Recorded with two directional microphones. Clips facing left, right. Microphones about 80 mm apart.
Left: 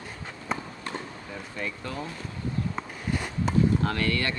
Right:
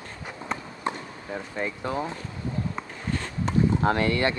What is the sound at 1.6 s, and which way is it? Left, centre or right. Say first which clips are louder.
Speech: right 5 dB; right.